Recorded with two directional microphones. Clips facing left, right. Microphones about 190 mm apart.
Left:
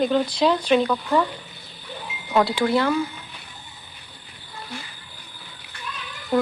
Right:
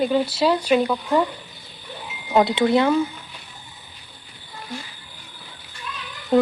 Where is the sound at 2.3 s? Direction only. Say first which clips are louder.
Right 3 dB; 20° right (ahead or behind).